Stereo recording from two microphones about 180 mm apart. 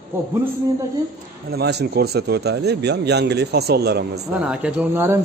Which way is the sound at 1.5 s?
65° right (ahead or behind).